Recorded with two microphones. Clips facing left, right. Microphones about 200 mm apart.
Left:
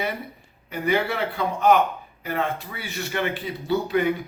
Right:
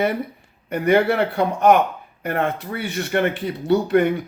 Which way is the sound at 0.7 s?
55° right (ahead or behind).